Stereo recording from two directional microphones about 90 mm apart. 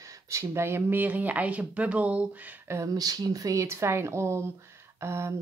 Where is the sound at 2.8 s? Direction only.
45° right (ahead or behind).